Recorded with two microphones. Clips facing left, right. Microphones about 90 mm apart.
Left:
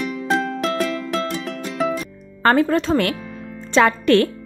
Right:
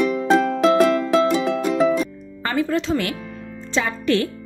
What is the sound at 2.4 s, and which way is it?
Speech, 50° left (ahead or behind).